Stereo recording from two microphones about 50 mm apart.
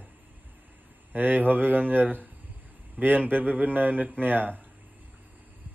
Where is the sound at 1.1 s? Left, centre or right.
Right.